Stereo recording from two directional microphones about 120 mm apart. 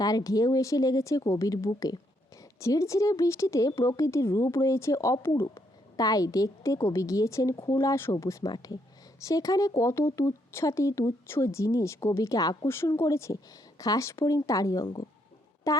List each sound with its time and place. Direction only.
0.0 s a woman's voice: 30° left (ahead or behind)